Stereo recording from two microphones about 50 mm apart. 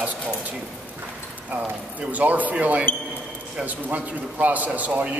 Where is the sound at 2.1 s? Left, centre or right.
Right.